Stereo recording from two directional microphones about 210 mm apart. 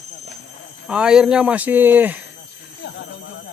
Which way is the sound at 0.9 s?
5° right (ahead or behind).